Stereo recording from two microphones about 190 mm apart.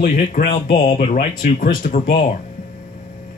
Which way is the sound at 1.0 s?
45° left (ahead or behind).